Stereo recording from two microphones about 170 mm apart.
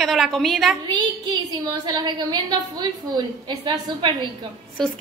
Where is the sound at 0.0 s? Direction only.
Centre (ahead or behind).